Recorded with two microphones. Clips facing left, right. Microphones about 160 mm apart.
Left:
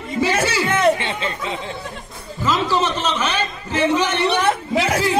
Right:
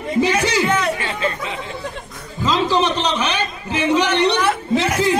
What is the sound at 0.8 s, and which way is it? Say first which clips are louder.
Chatter: left 4 dB; 25° left (ahead or behind).